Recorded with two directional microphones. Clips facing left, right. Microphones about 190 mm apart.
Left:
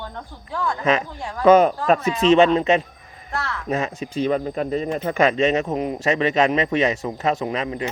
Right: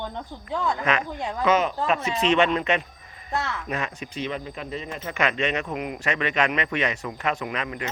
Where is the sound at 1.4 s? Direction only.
40° left (ahead or behind).